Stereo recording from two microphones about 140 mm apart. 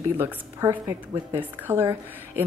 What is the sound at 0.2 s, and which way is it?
A woman's voice, 20° right (ahead or behind).